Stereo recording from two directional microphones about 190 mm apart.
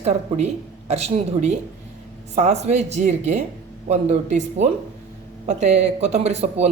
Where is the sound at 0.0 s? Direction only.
35° right (ahead or behind).